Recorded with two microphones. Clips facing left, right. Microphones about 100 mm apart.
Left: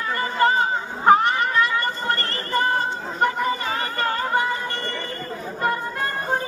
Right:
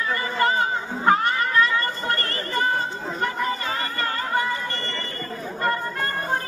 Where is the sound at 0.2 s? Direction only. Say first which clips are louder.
Left 5 dB; 30° left (ahead or behind).